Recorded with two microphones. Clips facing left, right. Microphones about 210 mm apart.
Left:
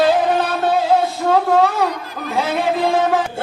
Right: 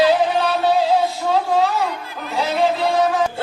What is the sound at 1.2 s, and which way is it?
A woman's voice, 55° left (ahead or behind).